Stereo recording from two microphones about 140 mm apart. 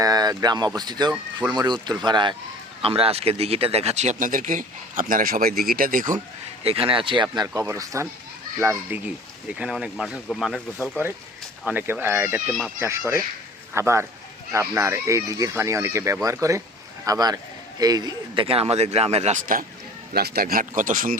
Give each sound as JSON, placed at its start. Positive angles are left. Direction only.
{"t": 0.0, "sound": "speech", "side_deg": -25}
{"t": 2.8, "sound": "speech", "side_deg": -45}
{"t": 6.7, "sound": "speech", "side_deg": -40}
{"t": 7.7, "sound": "speech", "side_deg": -20}
{"t": 9.6, "sound": "speech", "side_deg": -5}
{"t": 11.6, "sound": "speech", "side_deg": -10}
{"t": 18.4, "sound": "speech", "side_deg": -45}
{"t": 20.3, "sound": "speech", "side_deg": -90}